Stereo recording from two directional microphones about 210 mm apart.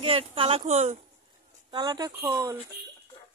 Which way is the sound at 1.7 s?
20° right (ahead or behind).